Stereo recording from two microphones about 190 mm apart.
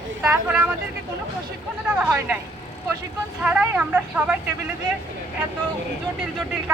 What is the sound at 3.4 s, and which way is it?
Speech, 10° right (ahead or behind).